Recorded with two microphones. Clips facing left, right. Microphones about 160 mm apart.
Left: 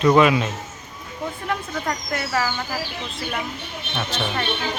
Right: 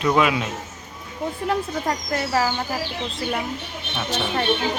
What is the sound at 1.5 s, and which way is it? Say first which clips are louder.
Speech: right 3 dB; 30° right (ahead or behind).